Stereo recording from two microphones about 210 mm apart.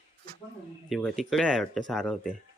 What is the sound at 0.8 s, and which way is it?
Speech, centre (ahead or behind).